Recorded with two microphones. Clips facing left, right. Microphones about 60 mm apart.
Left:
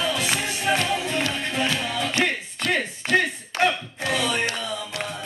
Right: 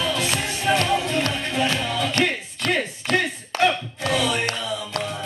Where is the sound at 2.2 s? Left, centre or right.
Right.